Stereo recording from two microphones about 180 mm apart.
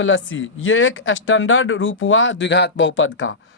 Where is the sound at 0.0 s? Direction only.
90° left.